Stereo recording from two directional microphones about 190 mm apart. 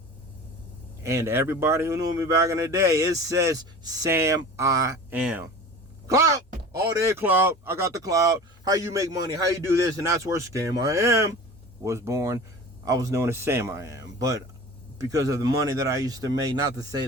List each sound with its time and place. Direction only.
1.0 s speech: 15° right (ahead or behind)
5.1 s speech: 10° right (ahead or behind)